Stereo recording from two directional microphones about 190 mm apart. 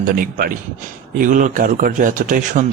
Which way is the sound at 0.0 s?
45° right (ahead or behind).